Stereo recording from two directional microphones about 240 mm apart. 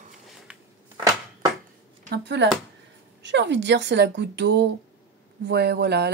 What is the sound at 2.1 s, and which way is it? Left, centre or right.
Speech, right.